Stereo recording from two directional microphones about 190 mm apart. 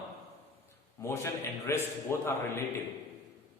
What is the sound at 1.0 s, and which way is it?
A man's voice, 15° left (ahead or behind).